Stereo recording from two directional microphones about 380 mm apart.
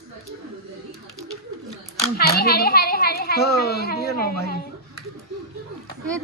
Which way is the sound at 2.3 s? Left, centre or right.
Left.